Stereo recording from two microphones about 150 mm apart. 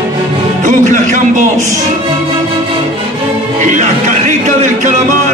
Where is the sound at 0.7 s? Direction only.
60° right (ahead or behind).